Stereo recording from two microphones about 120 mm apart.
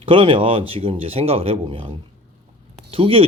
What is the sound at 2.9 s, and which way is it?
Speech, 50° right (ahead or behind).